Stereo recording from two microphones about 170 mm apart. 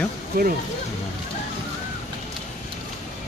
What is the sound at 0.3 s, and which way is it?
Speech, 60° right (ahead or behind).